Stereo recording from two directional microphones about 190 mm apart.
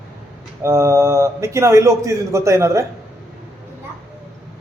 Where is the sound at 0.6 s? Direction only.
15° right (ahead or behind).